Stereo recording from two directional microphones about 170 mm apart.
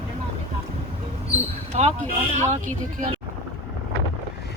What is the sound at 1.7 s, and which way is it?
Speech, 40° right (ahead or behind).